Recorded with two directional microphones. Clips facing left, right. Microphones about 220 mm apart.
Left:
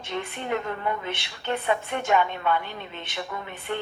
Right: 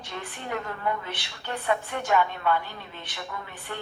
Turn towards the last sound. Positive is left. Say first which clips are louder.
# left 5 dB
turn(degrees=20)  # may be behind; listen again after turning